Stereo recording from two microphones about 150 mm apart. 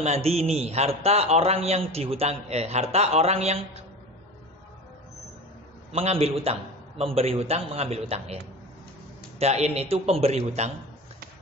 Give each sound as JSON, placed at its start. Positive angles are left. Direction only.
{"t": 0.0, "sound": "a man's voice", "side_deg": -45}
{"t": 5.9, "sound": "a man's voice", "side_deg": -40}
{"t": 9.4, "sound": "a man's voice", "side_deg": -45}